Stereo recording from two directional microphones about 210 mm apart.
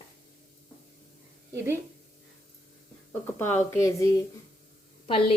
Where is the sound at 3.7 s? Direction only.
15° left (ahead or behind).